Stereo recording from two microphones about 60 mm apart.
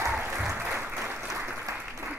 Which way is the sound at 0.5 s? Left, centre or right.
Right.